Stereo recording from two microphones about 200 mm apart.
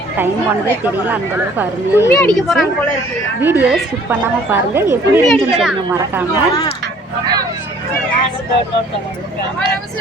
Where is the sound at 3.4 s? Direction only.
10° right (ahead or behind).